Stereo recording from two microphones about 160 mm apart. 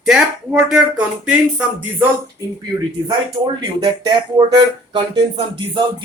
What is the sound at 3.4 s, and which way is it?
Speech, 25° right (ahead or behind).